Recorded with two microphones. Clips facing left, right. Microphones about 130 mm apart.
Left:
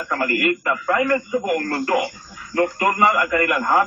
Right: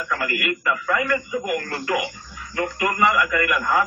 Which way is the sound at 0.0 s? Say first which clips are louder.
Left 4 dB; 45° left (ahead or behind).